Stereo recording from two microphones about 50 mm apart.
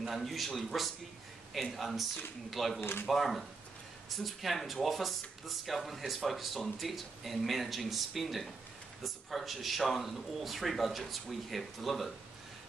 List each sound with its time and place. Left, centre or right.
0.0 s speech: centre
2.8 s speech: left
3.1 s speech: centre